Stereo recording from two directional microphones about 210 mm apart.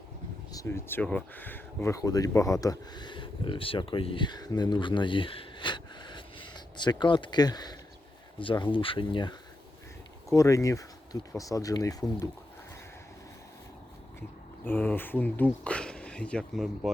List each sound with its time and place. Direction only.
0.5 s speech: 15° left (ahead or behind)
10.3 s speech: 15° left (ahead or behind)
14.2 s speech: 10° left (ahead or behind)